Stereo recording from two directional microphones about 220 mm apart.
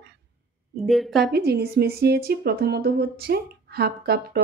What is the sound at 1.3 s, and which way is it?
A woman's voice, 45° right (ahead or behind).